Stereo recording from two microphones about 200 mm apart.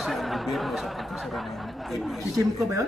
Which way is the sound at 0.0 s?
Centre (ahead or behind).